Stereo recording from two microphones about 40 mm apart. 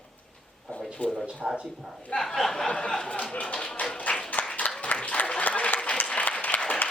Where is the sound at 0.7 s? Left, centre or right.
Left.